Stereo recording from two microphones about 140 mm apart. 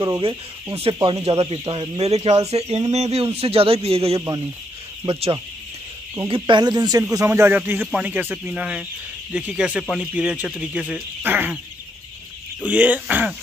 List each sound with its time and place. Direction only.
0.0 s speech: 35° right (ahead or behind); by 11.6 s 10° right (ahead or behind)
12.6 s speech: 10° right (ahead or behind)